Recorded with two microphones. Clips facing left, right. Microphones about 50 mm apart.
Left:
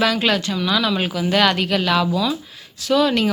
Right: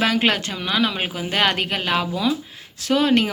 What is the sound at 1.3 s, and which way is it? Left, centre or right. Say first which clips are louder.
Speech: left 3 dB; right.